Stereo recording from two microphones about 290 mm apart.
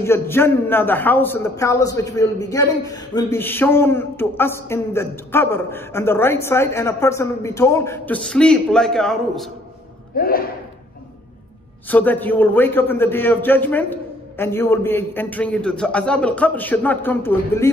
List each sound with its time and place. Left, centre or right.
0.0 s a man's voice: centre
10.1 s speech: left
11.9 s a man's voice: centre